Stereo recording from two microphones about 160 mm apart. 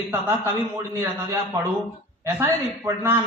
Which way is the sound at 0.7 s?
15° right (ahead or behind).